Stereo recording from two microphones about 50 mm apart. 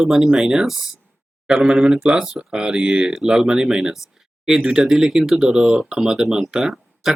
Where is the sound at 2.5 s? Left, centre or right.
Centre.